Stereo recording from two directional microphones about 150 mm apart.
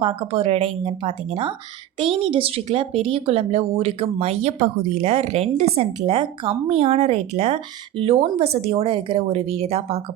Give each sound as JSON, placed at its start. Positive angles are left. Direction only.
{"t": 0.0, "sound": "speech", "side_deg": -35}